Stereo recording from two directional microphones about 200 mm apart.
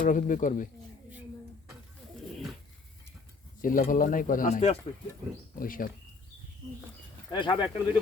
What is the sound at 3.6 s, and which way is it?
Speech, 45° left (ahead or behind).